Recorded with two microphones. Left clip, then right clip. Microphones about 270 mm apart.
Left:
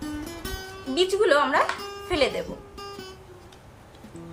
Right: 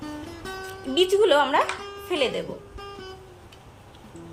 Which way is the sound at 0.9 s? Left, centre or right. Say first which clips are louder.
Right 2 dB; right.